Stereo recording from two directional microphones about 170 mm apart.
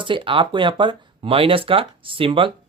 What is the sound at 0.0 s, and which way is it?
Speech, 30° right (ahead or behind).